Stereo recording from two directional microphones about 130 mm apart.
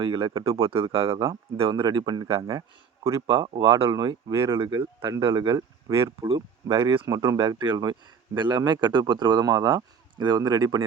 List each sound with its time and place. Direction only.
0.0 s speech: 35° right (ahead or behind)
0.7 s speech: 45° right (ahead or behind)
5.9 s speech: 25° right (ahead or behind)
6.2 s speech: 40° right (ahead or behind)
7.1 s speech: 25° right (ahead or behind)